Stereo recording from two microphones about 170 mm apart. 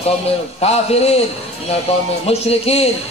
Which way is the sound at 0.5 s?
35° left (ahead or behind).